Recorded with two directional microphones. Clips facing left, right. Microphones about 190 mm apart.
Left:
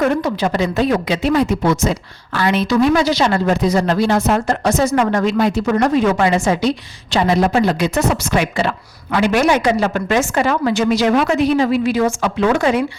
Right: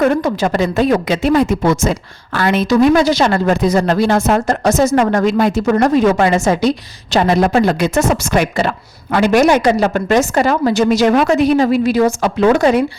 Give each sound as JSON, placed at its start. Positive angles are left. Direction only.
{"t": 0.0, "sound": "speech", "side_deg": -50}